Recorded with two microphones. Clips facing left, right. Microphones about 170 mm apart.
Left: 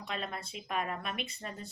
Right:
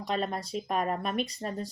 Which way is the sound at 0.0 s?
35° right (ahead or behind).